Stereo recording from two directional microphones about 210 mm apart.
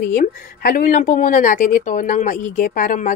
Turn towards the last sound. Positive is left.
turn(degrees=40)  # may be behind; listen again after turning